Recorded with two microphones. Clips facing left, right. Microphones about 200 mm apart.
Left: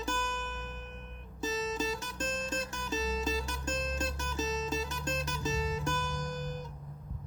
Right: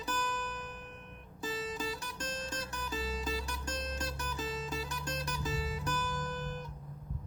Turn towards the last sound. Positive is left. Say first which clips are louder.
# left 1 dB
turn(degrees=20)  # may be behind; listen again after turning